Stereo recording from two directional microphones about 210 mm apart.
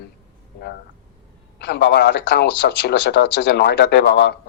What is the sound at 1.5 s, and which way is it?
A man's voice, 50° left (ahead or behind).